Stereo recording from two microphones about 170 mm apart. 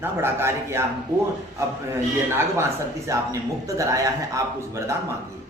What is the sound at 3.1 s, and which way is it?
A man's voice, 20° right (ahead or behind).